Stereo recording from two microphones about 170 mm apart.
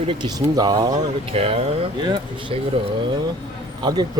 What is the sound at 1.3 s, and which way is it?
Speech, 35° right (ahead or behind).